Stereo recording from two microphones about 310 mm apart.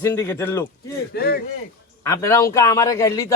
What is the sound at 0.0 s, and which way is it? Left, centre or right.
Speech, centre.